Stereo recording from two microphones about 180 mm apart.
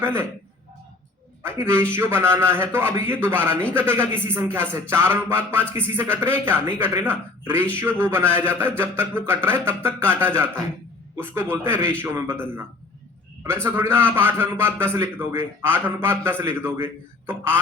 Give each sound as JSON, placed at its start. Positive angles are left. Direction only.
{"t": 0.0, "sound": "a man's voice", "side_deg": -15}
{"t": 1.4, "sound": "a man's voice", "side_deg": -15}